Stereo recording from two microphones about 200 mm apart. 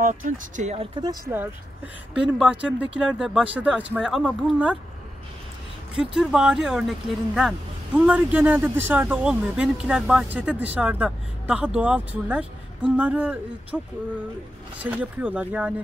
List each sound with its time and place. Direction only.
0.0 s speech: 40° right (ahead or behind)
1.0 s speech: 15° right (ahead or behind)
2.1 s speech: centre (ahead or behind)
6.1 s speech: centre (ahead or behind)
14.8 s speech: 10° right (ahead or behind)